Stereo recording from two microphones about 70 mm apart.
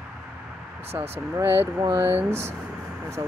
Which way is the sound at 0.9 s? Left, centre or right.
Right.